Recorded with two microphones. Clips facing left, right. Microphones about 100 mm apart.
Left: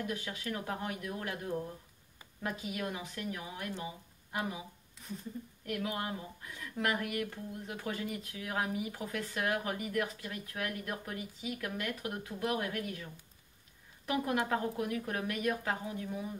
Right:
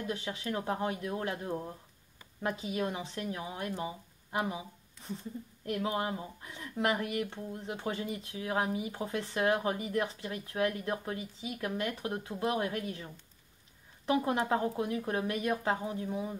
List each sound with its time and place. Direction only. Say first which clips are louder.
0.0 s speech: right 2 dB; 30° right (ahead or behind)
5.7 s speech: right 4 dB; 25° right (ahead or behind)